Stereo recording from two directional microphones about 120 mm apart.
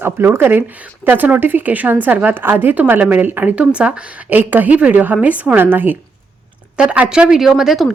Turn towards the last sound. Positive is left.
turn(degrees=-5)  # may be behind; listen again after turning